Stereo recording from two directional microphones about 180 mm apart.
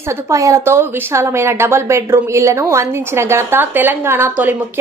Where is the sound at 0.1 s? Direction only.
15° right (ahead or behind).